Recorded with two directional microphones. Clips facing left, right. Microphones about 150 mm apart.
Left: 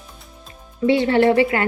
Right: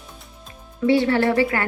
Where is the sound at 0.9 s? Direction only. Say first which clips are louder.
Left 2 dB; 20° left (ahead or behind).